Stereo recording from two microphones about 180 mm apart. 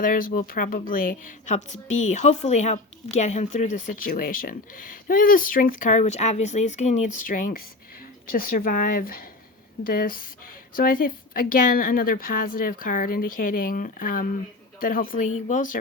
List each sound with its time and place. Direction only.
0.0 s speech: 50° left (ahead or behind)